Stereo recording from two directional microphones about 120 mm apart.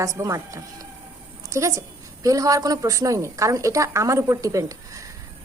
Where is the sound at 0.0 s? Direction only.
25° right (ahead or behind).